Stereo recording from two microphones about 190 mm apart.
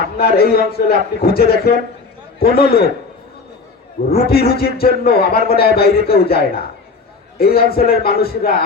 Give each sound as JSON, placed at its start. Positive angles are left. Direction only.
{"t": 0.2, "sound": "speech", "side_deg": 55}
{"t": 4.3, "sound": "a man's voice", "side_deg": 55}